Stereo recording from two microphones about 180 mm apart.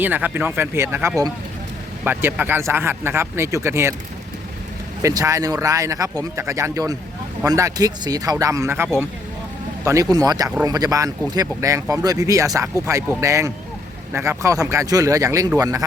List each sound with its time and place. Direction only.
0.0 s speech: 10° right (ahead or behind)
5.0 s speech: 15° right (ahead or behind)